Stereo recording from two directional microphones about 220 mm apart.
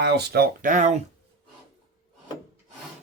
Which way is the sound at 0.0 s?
50° right (ahead or behind).